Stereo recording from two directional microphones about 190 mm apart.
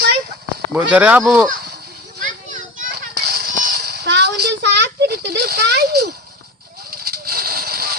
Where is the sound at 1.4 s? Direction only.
55° right (ahead or behind).